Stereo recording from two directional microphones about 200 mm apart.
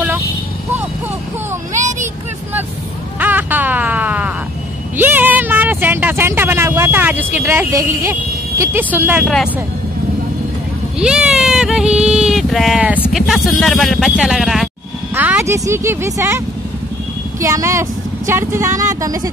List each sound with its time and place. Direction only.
1.8 s vehicle: 40° right (ahead or behind)
3.2 s music: 10° right (ahead or behind)
4.9 s speech: 10° right (ahead or behind)
11.0 s a sound: 5° right (ahead or behind)
15.1 s speech: 10° right (ahead or behind)